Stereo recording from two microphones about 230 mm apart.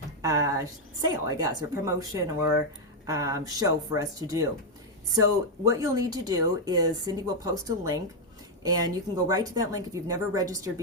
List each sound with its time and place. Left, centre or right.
0.2 s a woman's voice: centre